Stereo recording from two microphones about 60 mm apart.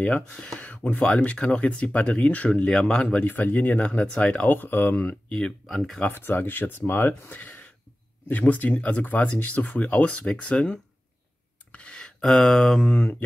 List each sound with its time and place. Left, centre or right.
0.6 s a sound: left
0.9 s speech: centre
3.3 s speech: left
4.5 s speech: left
5.7 s speech: centre
6.1 s speech: left
11.7 s a sound: centre
12.8 s speech: centre